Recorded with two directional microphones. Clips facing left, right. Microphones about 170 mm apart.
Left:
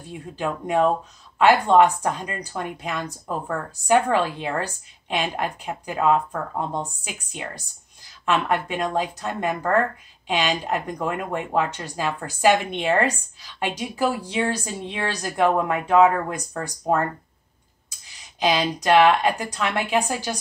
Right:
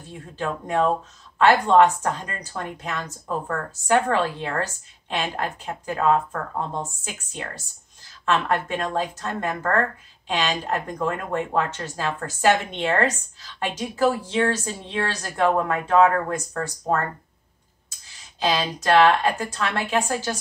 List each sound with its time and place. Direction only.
0.1 s a woman's voice: 15° left (ahead or behind)
18.0 s a woman's voice: 15° left (ahead or behind)